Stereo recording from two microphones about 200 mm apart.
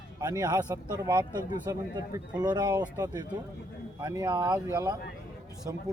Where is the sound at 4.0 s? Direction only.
20° right (ahead or behind).